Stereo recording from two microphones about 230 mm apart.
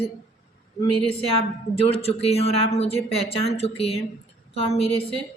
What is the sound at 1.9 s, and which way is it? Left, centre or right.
A woman's voice, left.